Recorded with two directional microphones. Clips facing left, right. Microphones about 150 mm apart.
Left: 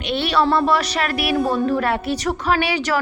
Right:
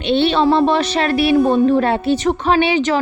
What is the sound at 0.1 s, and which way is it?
A woman's voice, 25° right (ahead or behind).